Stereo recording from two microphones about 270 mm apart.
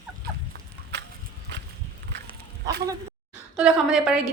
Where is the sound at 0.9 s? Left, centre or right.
Right.